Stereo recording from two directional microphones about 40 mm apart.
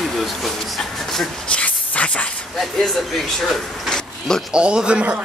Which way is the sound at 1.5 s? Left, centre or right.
Left.